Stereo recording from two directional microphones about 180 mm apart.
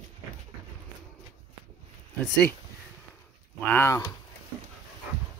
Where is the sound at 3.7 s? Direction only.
15° left (ahead or behind).